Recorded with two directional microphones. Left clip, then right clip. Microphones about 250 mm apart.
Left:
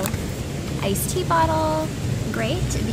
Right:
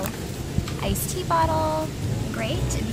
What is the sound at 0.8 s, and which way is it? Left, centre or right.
Speech, centre.